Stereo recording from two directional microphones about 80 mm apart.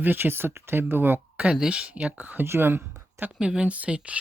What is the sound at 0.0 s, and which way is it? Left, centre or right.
Speech, right.